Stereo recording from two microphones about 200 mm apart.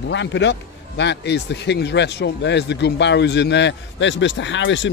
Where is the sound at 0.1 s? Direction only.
60° left (ahead or behind).